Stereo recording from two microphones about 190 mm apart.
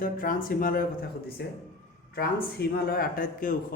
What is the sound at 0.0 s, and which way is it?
Speech, 45° left (ahead or behind).